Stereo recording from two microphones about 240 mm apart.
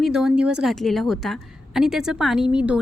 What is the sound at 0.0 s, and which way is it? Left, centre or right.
A woman's voice, centre.